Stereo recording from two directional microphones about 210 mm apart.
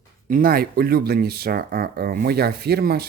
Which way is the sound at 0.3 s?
45° right (ahead or behind).